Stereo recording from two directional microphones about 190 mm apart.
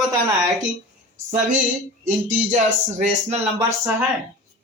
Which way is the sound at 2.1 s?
40° right (ahead or behind).